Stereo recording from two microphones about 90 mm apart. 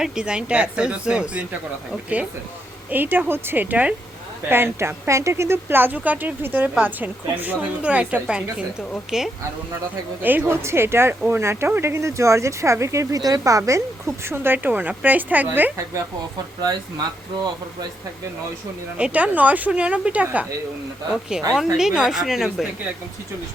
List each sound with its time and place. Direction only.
0.0 s speech: 10° right (ahead or behind)
2.9 s speech: 20° right (ahead or behind); by 9.3 s 5° right (ahead or behind)
10.2 s speech: 25° right (ahead or behind)
16.6 s speech: 50° right (ahead or behind)
18.9 s speech: 15° right (ahead or behind)
21.5 s speech: 5° right (ahead or behind)